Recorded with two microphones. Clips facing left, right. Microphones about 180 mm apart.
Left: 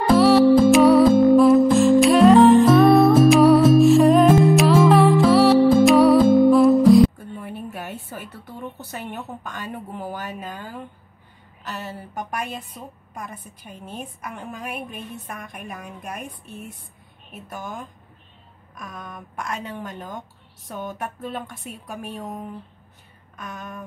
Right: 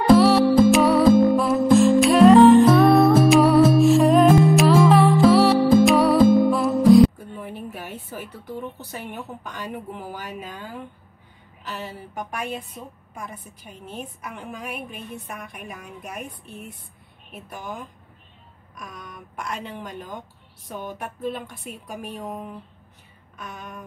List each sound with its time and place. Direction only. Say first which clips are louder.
0.2 s music: left 2 dB; centre (ahead or behind)
9.9 s speech: left 3 dB; 45° left (ahead or behind)
12.2 s speech: even; 40° left (ahead or behind)
21.0 s speech: right 1 dB; 45° left (ahead or behind)